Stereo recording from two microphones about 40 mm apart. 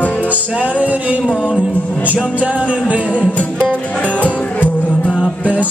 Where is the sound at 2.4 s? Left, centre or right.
Right.